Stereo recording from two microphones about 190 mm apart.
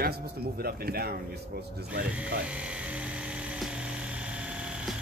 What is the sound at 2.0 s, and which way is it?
Speech, 5° right (ahead or behind).